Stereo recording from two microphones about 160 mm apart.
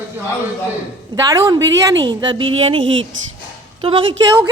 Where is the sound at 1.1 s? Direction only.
20° right (ahead or behind).